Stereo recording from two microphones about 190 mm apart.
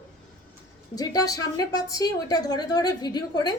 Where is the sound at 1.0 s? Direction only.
20° left (ahead or behind).